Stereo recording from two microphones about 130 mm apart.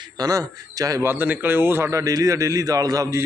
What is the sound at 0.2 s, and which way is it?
Speech, 30° right (ahead or behind).